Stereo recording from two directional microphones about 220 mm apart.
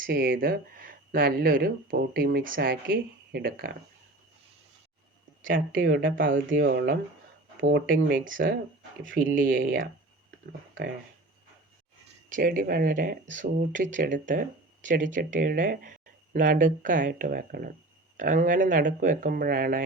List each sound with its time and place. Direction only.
0.0 s speech: 40° right (ahead or behind)
5.8 s speech: 45° right (ahead or behind)
12.3 s speech: 40° right (ahead or behind)